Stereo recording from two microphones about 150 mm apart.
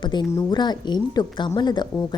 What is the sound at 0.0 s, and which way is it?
A woman's voice, 30° left (ahead or behind).